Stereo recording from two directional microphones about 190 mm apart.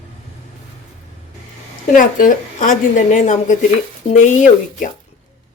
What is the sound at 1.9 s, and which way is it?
A woman's voice, 45° left (ahead or behind).